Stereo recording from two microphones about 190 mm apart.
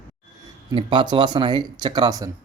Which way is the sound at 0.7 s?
25° right (ahead or behind).